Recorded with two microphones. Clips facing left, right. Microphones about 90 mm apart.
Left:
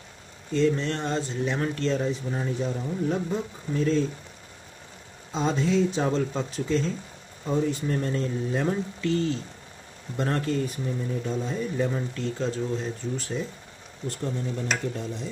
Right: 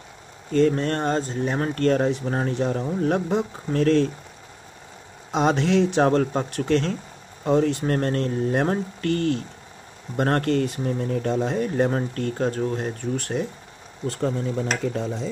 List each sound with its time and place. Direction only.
0.5 s speech: 50° right (ahead or behind); by 4.1 s 75° right (ahead or behind)
5.3 s speech: 75° right (ahead or behind)
14.0 s speech: 90° right